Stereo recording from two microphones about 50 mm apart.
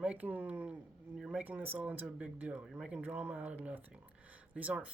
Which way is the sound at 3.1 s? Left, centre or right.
Right.